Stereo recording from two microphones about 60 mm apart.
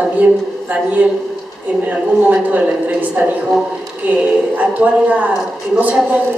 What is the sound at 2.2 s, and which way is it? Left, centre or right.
A woman's voice, right.